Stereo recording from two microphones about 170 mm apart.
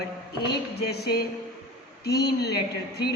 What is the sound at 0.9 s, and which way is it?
A woman's voice, 70° left (ahead or behind).